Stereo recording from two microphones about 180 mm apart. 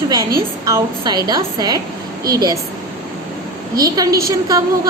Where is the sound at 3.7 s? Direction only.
20° right (ahead or behind).